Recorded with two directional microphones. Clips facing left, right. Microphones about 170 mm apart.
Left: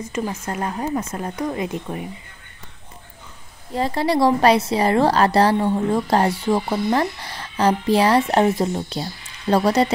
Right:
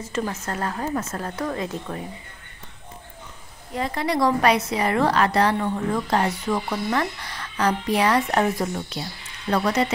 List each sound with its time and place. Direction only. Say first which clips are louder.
0.1 s speech: even; 10° left (ahead or behind)
3.7 s a woman's voice: left 4 dB; 30° left (ahead or behind)